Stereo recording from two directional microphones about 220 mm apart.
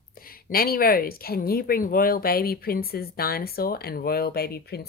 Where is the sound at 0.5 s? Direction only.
40° left (ahead or behind).